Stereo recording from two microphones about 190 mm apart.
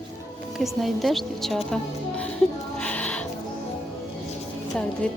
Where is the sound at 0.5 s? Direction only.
Centre (ahead or behind).